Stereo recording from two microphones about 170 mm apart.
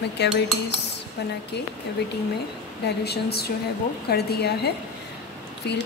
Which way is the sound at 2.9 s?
70° left (ahead or behind).